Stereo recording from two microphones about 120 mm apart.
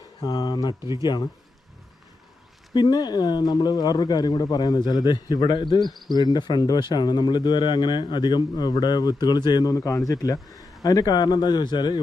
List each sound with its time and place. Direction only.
0.2 s speech: 35° left (ahead or behind)
0.8 s speech: 25° right (ahead or behind)
1.0 s speech: 35° left (ahead or behind)
2.7 s speech: 35° left (ahead or behind)